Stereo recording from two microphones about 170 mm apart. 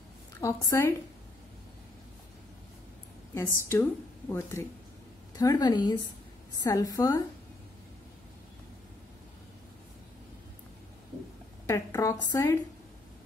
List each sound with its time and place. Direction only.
0.4 s speech: 20° left (ahead or behind)
3.6 s a woman's voice: 15° left (ahead or behind)
11.6 s speech: 15° left (ahead or behind)